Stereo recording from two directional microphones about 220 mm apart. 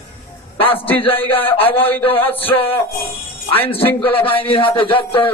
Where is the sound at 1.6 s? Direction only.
25° left (ahead or behind).